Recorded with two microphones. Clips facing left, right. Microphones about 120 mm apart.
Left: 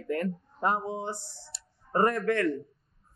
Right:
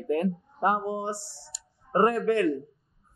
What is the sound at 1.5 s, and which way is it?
Tick, centre (ahead or behind).